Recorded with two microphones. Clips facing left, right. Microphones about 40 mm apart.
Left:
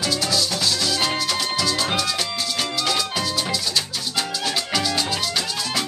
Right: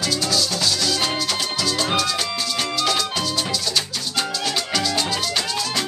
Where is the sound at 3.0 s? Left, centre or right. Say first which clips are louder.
Right 1 dB; centre.